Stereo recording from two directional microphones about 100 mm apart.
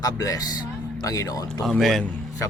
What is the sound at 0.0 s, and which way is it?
Speech, 35° left (ahead or behind).